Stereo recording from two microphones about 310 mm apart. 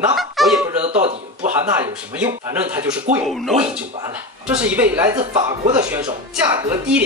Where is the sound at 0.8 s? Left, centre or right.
Right.